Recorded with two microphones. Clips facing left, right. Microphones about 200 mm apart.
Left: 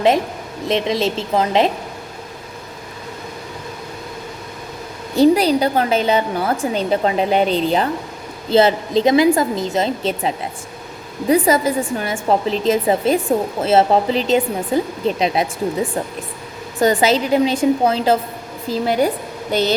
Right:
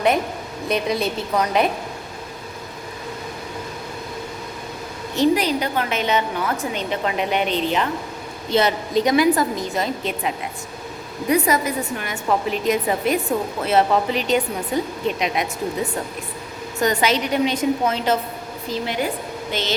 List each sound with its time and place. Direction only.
0.7 s speech: 25° left (ahead or behind)
0.9 s speech: 90° left
1.3 s speech: 25° left (ahead or behind)
5.1 s a woman's voice: 35° left (ahead or behind)